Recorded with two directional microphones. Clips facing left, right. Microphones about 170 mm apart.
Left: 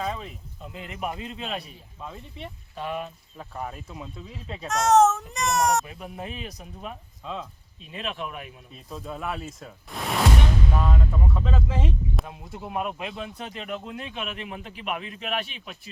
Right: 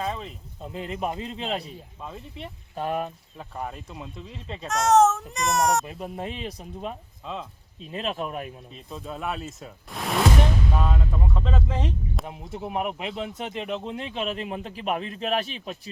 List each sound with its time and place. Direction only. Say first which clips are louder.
0.0 s speech: right 1 dB; centre (ahead or behind)
0.6 s speech: right 4 dB; 35° right (ahead or behind)
2.0 s speech: left 1 dB; centre (ahead or behind)
2.7 s speech: right 4 dB; 45° right (ahead or behind)
3.3 s speech: left 1 dB; centre (ahead or behind)
5.8 s speech: right 4 dB; 35° right (ahead or behind)
7.2 s speech: even; centre (ahead or behind)
7.9 s speech: right 4 dB; 35° right (ahead or behind)
8.9 s speech: right 1 dB; centre (ahead or behind)
10.9 s a sound: left 1 dB; centre (ahead or behind)
12.2 s speech: right 4 dB; 20° right (ahead or behind)